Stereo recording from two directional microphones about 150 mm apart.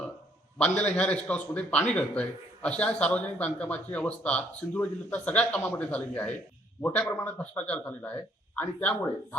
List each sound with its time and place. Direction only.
0.6 s a man's voice: 10° left (ahead or behind)